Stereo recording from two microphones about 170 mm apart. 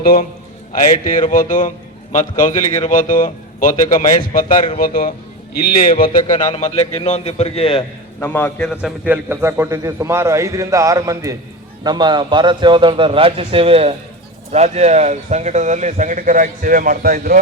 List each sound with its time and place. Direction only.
0.0 s a man's voice: 60° left (ahead or behind)
6.2 s a man's voice: 30° left (ahead or behind)
8.2 s a man's voice: 10° left (ahead or behind)
8.8 s a man's voice: 10° right (ahead or behind); by 17.4 s 60° right (ahead or behind)